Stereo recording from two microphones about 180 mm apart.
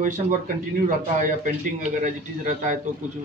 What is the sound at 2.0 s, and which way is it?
Speech, 45° right (ahead or behind).